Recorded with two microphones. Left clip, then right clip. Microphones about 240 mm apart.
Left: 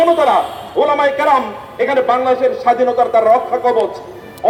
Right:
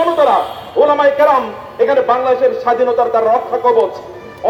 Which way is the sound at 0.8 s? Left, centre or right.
Left.